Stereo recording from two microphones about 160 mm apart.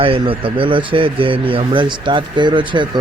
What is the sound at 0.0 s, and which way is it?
A man's voice, 35° right (ahead or behind).